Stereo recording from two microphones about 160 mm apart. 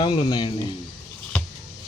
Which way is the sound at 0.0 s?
30° left (ahead or behind).